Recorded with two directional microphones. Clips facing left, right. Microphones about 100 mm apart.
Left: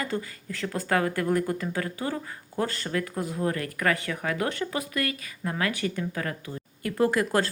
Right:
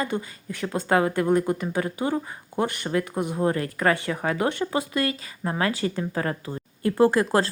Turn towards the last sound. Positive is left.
turn(degrees=-30)  # may be behind; listen again after turning